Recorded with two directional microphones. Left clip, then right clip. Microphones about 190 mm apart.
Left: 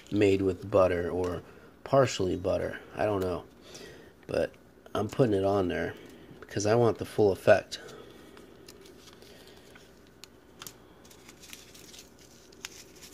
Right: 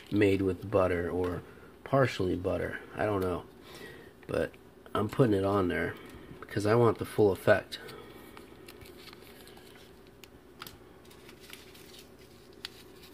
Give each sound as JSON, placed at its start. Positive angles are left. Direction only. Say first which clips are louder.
{"t": 0.2, "sound": "speech", "louder": "left 2 dB", "side_deg": 5}